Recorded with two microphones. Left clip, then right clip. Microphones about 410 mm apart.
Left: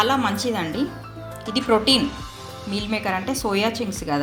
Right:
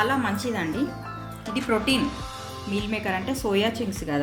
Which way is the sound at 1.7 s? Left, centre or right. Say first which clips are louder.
Left 6 dB; centre.